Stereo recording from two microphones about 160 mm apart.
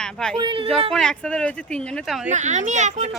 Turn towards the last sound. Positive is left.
turn(degrees=-50)  # may be behind; listen again after turning